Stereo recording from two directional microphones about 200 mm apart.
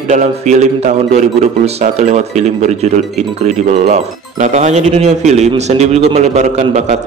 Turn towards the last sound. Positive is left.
turn(degrees=-35)  # may be behind; listen again after turning